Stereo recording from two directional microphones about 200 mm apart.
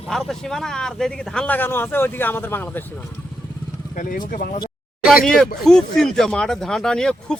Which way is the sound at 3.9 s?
40° left (ahead or behind).